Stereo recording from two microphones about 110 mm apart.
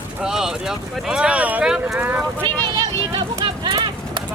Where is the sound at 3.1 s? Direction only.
50° right (ahead or behind).